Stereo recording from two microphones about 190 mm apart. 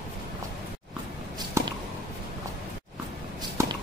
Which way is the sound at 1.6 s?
15° right (ahead or behind).